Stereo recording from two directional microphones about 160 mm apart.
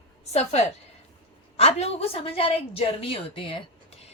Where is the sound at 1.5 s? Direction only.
40° left (ahead or behind).